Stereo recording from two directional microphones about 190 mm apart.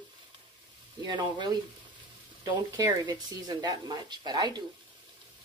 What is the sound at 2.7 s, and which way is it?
Speech, 15° right (ahead or behind).